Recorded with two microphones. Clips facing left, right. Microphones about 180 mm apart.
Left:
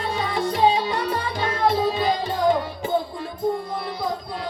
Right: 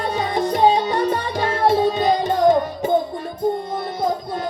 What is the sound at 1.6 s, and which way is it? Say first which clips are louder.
Music: right 4 dB; 25° right (ahead or behind).